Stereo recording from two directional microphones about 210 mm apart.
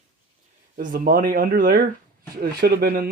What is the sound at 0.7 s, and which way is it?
Speech, 40° right (ahead or behind).